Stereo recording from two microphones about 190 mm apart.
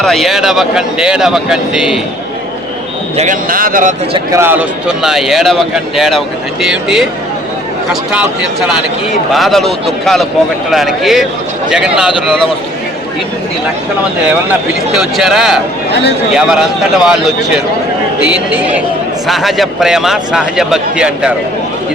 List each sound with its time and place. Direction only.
0.0 s speech: centre (ahead or behind)
3.2 s speech: 45° right (ahead or behind)
4.1 s speech: 15° right (ahead or behind)
8.1 s speech: 5° right (ahead or behind)
14.3 s a man's voice: 5° right (ahead or behind)